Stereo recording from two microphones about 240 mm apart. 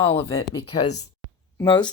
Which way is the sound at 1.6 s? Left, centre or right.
Centre.